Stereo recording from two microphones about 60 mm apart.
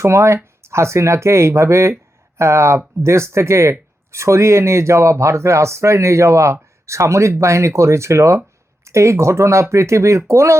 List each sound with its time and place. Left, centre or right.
0.0 s speech: right